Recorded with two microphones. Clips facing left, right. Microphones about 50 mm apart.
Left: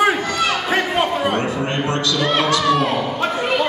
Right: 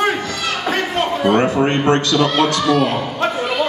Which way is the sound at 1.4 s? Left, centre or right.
Right.